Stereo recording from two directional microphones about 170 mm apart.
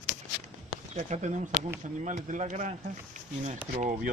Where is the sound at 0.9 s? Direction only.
45° right (ahead or behind).